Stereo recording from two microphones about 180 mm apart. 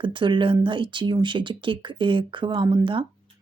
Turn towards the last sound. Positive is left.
turn(degrees=-25)  # may be behind; listen again after turning